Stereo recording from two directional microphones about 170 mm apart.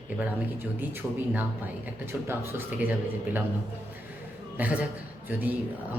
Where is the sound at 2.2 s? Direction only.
15° right (ahead or behind).